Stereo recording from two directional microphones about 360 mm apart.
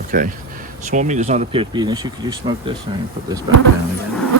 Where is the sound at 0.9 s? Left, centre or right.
Centre.